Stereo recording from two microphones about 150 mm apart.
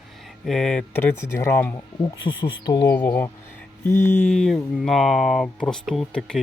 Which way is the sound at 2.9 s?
10° left (ahead or behind).